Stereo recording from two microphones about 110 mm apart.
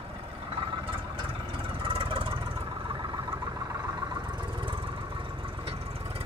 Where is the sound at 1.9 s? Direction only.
60° right (ahead or behind).